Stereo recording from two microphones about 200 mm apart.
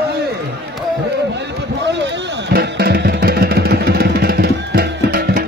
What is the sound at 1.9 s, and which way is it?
Music, 60° right (ahead or behind).